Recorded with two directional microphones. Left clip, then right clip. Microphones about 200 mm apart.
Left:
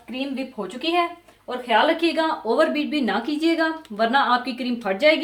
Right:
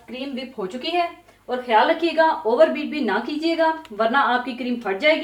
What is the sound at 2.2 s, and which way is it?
A woman's voice, 55° left (ahead or behind).